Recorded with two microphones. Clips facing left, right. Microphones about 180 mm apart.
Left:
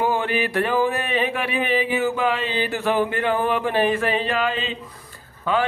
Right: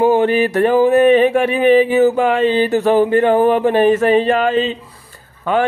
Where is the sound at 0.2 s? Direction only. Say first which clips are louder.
Right 9 dB; 45° right (ahead or behind).